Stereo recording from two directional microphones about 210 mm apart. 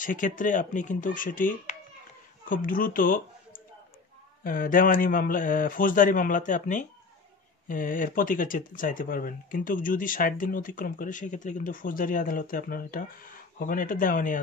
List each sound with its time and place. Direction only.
0.0 s speech: 40° left (ahead or behind)